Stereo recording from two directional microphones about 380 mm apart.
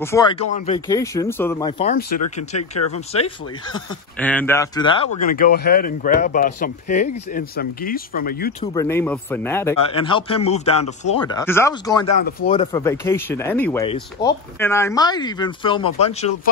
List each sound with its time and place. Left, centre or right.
0.0 s a man's voice: centre
3.7 s speech: centre; by 8.6 s left
8.7 s a man's voice: centre